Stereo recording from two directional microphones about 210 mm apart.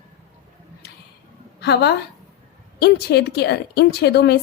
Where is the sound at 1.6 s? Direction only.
55° left (ahead or behind).